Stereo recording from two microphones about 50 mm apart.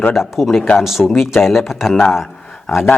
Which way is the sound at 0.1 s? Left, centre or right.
Centre.